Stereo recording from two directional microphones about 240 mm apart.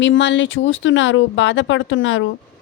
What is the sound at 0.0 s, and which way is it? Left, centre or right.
Speech, left.